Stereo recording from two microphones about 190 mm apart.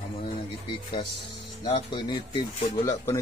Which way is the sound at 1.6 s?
25° left (ahead or behind).